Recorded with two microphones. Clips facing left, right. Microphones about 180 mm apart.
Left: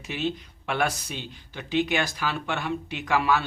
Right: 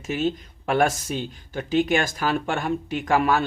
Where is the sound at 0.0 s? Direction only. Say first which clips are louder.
Right 5 dB; 45° right (ahead or behind).